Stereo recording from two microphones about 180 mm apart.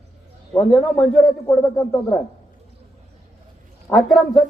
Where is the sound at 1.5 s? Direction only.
15° left (ahead or behind).